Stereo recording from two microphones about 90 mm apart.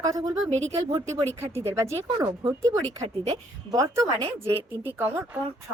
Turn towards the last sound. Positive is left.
turn(degrees=-30)  # may be behind; listen again after turning